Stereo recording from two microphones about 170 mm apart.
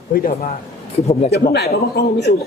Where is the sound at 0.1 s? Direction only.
60° left (ahead or behind).